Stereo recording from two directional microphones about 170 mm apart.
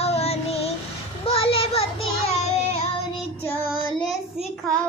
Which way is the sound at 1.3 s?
35° left (ahead or behind).